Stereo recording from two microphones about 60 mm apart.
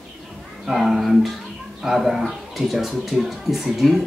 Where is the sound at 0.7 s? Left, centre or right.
Centre.